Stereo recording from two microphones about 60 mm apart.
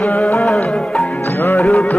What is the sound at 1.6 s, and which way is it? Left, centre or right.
Music, centre.